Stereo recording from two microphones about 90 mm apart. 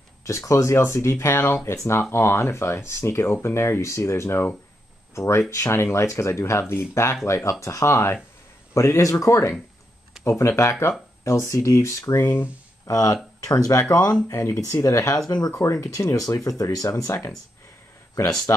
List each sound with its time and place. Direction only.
0.3 s speech: 35° left (ahead or behind)
12.8 s speech: 40° left (ahead or behind)